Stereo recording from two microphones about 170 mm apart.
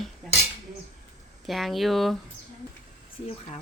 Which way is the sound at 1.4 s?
Centre (ahead or behind).